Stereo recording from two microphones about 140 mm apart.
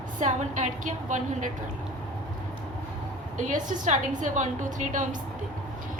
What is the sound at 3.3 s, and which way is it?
A woman's voice, 65° right (ahead or behind).